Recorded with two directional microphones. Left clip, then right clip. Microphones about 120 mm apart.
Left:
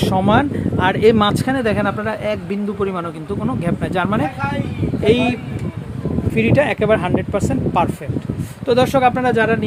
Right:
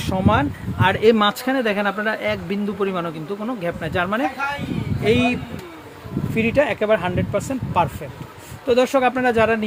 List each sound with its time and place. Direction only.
0.0 s speech: 35° left (ahead or behind); by 9.6 s 20° left (ahead or behind)